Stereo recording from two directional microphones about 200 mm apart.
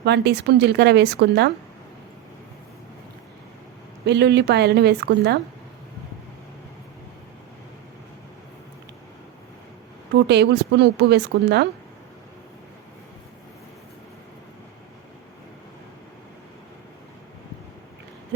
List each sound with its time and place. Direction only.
0.0 s a woman's voice: 60° right (ahead or behind)
4.0 s a woman's voice: 60° right (ahead or behind)
10.2 s a woman's voice: 55° right (ahead or behind)